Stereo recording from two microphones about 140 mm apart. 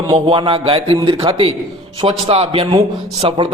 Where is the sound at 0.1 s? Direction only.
35° right (ahead or behind).